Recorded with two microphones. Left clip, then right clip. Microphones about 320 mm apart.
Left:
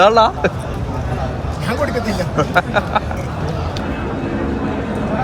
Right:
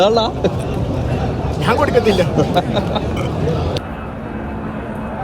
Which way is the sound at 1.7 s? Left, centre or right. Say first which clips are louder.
Right 6 dB; centre.